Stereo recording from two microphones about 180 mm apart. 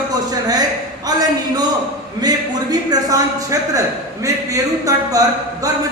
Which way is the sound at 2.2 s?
20° right (ahead or behind).